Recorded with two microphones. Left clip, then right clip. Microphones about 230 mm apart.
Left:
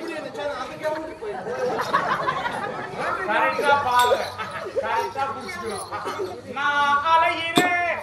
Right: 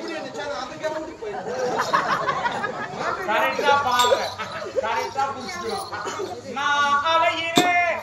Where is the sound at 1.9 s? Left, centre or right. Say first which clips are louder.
Right 1 dB; right.